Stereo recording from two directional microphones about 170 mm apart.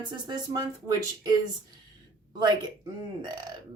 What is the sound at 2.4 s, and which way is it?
Speech, 25° right (ahead or behind).